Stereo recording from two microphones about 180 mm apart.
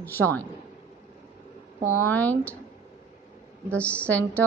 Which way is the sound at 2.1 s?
10° left (ahead or behind).